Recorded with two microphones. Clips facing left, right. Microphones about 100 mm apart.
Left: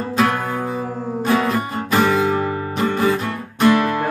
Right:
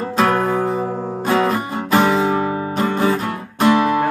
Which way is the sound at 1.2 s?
25° right (ahead or behind).